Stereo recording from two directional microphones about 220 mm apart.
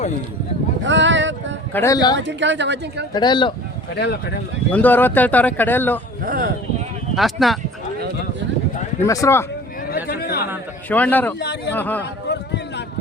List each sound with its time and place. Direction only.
0.9 s a sound: 55° right (ahead or behind)
1.7 s a man's voice: 15° left (ahead or behind)
2.1 s a woman's voice: 55° right (ahead or behind)
3.1 s speech: 20° left (ahead or behind)
3.9 s a man's voice: 50° left (ahead or behind)
4.7 s a man's voice: 10° left (ahead or behind)
6.2 s speech: 40° right (ahead or behind)
7.2 s speech: centre (ahead or behind)
9.0 s a man's voice: 15° left (ahead or behind)
9.9 s chatter: 45° left (ahead or behind)
10.8 s a man's voice: 5° left (ahead or behind)
11.3 s a man's voice: 50° left (ahead or behind)
11.7 s a man's voice: 10° left (ahead or behind)